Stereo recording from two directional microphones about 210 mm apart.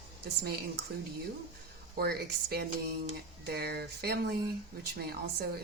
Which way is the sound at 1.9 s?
50° right (ahead or behind).